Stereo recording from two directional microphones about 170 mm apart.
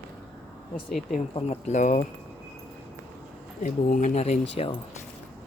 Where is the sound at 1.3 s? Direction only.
35° left (ahead or behind).